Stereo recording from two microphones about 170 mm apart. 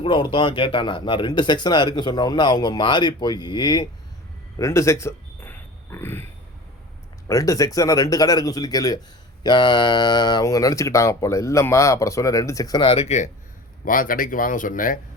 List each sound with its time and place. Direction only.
0.0 s speech: 30° left (ahead or behind)
4.5 s oink: 15° left (ahead or behind)
7.3 s speech: 20° left (ahead or behind); by 13.3 s 45° left (ahead or behind)
13.8 s speech: 55° left (ahead or behind)